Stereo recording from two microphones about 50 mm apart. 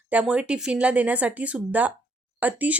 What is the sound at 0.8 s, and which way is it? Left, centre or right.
Speech, right.